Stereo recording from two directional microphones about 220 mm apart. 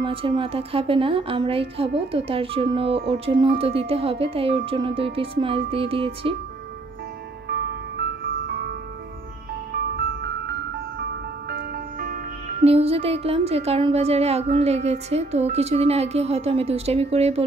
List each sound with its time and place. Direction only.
0.0 s a woman's voice: 25° right (ahead or behind)
7.4 s music: 50° right (ahead or behind)
9.9 s music: 50° right (ahead or behind)
12.6 s a woman's voice: 25° right (ahead or behind)